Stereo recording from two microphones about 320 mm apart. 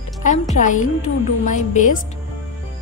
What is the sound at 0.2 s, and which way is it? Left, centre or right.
A woman's voice, left.